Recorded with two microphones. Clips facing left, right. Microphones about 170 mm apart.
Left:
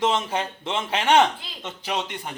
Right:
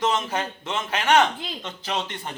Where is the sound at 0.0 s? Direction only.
25° left (ahead or behind).